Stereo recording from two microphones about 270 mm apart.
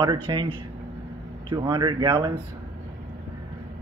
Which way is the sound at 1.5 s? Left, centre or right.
Centre.